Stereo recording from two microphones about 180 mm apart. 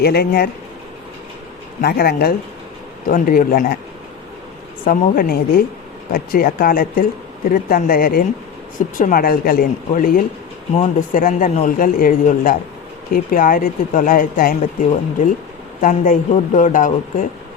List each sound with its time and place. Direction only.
0.0 s speech: 60° left (ahead or behind)
1.8 s speech: 60° left (ahead or behind)
4.9 s speech: 55° left (ahead or behind)